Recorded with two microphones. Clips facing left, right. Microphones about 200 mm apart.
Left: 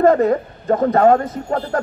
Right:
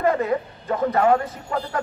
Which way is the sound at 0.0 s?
45° left (ahead or behind).